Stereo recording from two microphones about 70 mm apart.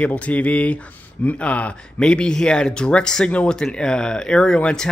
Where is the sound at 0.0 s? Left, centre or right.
Left.